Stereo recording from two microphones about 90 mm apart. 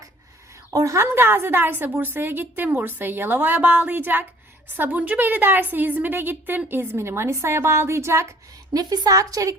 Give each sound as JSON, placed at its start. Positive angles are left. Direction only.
{"t": 0.7, "sound": "a woman's voice", "side_deg": -40}